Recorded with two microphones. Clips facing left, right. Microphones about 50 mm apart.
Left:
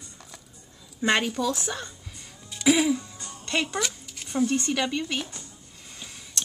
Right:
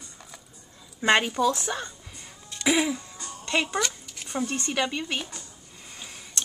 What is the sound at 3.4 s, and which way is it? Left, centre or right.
A child's voice, centre.